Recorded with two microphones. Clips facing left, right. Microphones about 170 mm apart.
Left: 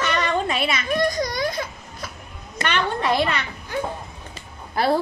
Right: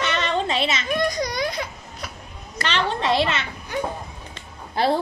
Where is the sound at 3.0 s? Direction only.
25° right (ahead or behind).